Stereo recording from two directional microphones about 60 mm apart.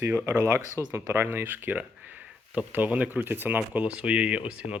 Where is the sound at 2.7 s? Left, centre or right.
Right.